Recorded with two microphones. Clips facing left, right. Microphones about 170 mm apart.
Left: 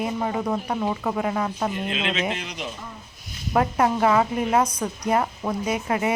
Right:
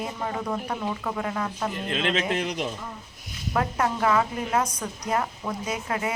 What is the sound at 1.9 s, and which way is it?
Speech, 50° right (ahead or behind).